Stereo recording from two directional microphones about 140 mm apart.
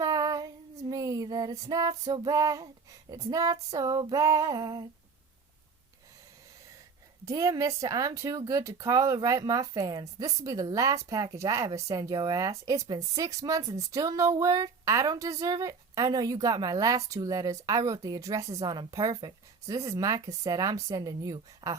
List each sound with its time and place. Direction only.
0.0 s female singing: 25° right (ahead or behind)
3.1 s speech: 25° right (ahead or behind)
7.3 s speech: 25° right (ahead or behind)